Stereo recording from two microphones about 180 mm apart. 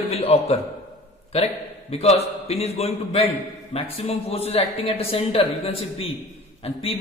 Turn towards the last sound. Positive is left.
turn(degrees=30)  # may be behind; listen again after turning